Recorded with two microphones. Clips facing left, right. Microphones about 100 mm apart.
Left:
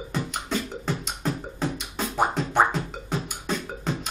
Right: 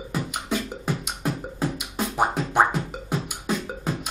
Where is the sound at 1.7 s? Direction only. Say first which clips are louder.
Right 1 dB; 10° right (ahead or behind).